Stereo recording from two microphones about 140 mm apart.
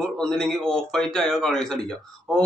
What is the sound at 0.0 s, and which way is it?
A man's voice, 5° left (ahead or behind).